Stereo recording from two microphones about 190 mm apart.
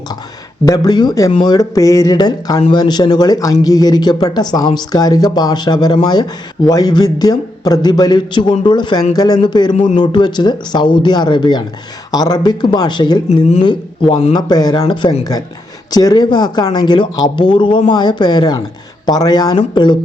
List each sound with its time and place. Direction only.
0.6 s speech: 20° left (ahead or behind)
9.7 s speech: 40° left (ahead or behind)
10.0 s speech: 25° left (ahead or behind)